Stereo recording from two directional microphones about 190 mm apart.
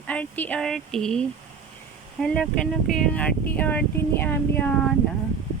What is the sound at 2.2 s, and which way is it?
Speech, centre (ahead or behind).